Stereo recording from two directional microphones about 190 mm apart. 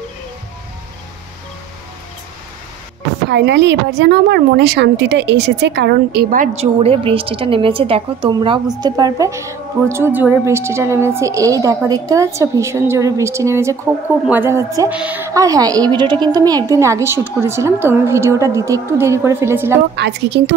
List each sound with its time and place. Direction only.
3.3 s a woman's voice: 65° right (ahead or behind); by 19.8 s 15° right (ahead or behind)
20.0 s speech: 65° right (ahead or behind)